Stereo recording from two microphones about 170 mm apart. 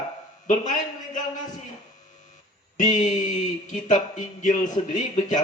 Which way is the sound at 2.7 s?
45° left (ahead or behind).